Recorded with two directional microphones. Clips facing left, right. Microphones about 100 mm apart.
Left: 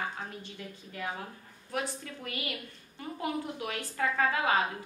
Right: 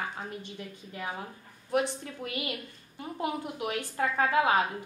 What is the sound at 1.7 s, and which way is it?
A woman's voice, 20° right (ahead or behind).